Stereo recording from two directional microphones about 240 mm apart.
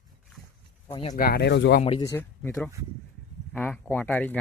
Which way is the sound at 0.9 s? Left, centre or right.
Left.